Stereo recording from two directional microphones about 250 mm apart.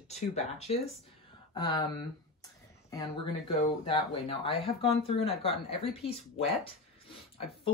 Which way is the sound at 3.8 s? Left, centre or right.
Left.